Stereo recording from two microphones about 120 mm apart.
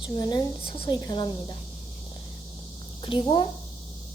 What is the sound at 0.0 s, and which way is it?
A woman's voice, 40° left (ahead or behind).